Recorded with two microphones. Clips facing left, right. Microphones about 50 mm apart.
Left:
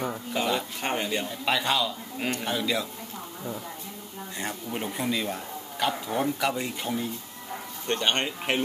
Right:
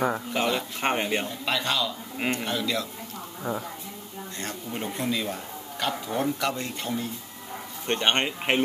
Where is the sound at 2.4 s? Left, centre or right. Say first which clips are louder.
Even; centre.